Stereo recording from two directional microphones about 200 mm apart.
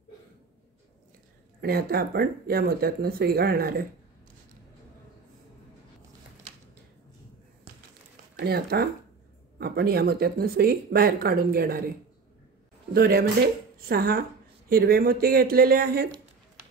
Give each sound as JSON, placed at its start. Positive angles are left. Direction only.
{"t": 1.6, "sound": "speech", "side_deg": -50}
{"t": 8.4, "sound": "speech", "side_deg": -50}
{"t": 12.9, "sound": "speech", "side_deg": -50}